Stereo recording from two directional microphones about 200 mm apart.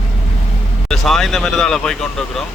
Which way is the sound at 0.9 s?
Centre (ahead or behind).